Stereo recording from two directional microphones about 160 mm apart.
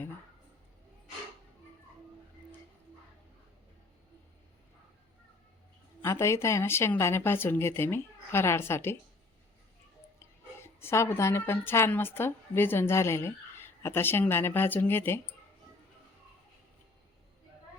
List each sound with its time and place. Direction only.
6.0 s speech: 20° left (ahead or behind)
10.2 s a woman's voice: 15° left (ahead or behind)